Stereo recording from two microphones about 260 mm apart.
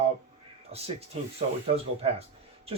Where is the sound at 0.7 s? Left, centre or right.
Right.